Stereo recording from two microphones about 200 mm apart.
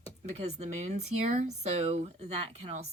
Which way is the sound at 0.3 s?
35° right (ahead or behind).